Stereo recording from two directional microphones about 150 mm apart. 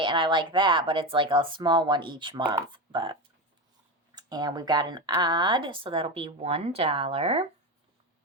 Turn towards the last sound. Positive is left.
turn(degrees=-40)  # may be behind; listen again after turning